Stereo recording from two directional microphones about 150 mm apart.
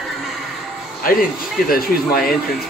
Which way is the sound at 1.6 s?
80° left.